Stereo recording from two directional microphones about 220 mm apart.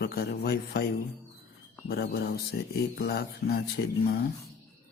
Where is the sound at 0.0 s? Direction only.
45° left (ahead or behind).